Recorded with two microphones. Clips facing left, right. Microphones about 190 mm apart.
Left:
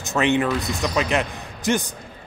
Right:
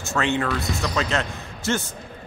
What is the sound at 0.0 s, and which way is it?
A man's voice, 20° left (ahead or behind).